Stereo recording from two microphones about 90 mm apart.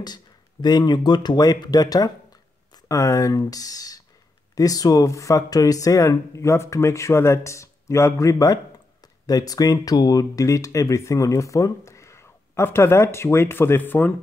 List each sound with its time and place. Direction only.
0.0 s speech: 50° left (ahead or behind); by 14.1 s 20° left (ahead or behind)